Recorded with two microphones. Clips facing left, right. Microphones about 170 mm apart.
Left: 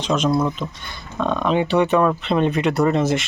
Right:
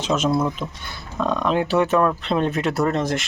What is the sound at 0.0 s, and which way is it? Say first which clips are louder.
Speech: left 1 dB; 5° right (ahead or behind).